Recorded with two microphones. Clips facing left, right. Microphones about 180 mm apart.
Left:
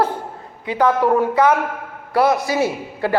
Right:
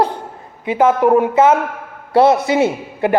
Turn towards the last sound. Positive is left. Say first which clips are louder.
# right 4 dB
turn(degrees=-20)  # may be behind; listen again after turning